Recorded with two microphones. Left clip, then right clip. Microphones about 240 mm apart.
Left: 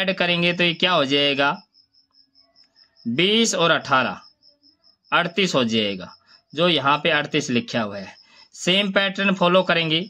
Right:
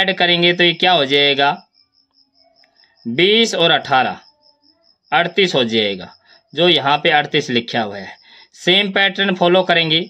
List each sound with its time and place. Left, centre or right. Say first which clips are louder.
0.0 s speech: right 7 dB; centre
3.2 s speech: right 6 dB; centre
5.9 s speech: right 5 dB; left
6.3 s a sound: right 6 dB; centre
6.9 s speech: right 5 dB; centre
8.1 s a sound: right 7 dB; left
8.4 s a sound: right 6 dB; centre
8.8 s speech: right 5 dB; centre
9.8 s speech: right 6 dB; left